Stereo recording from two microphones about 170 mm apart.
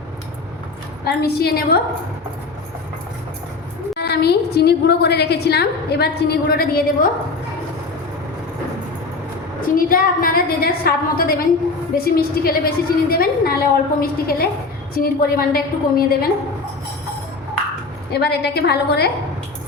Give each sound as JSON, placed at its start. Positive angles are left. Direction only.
{"t": 1.0, "sound": "a woman's voice", "side_deg": 70}
{"t": 3.9, "sound": "a woman's voice", "side_deg": 70}
{"t": 9.6, "sound": "a woman's voice", "side_deg": 55}
{"t": 18.1, "sound": "a woman's voice", "side_deg": 70}